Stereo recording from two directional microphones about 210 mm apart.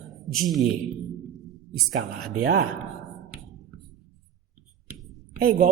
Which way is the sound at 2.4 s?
50° right (ahead or behind).